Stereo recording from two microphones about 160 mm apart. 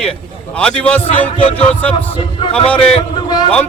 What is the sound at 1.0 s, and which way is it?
Speech, 35° left (ahead or behind).